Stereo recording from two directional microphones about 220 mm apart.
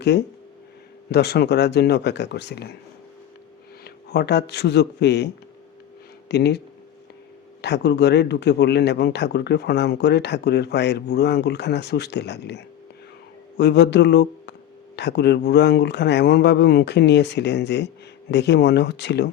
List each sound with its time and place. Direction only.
0.0 s speech: 50° left (ahead or behind)
3.8 s speech: 50° left (ahead or behind)
7.6 s speech: 50° left (ahead or behind)